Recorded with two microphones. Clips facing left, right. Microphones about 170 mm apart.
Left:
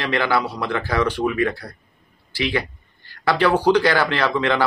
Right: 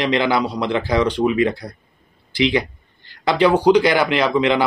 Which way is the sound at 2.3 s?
20° right (ahead or behind).